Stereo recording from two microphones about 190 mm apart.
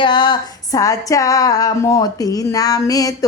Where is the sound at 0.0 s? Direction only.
25° left (ahead or behind).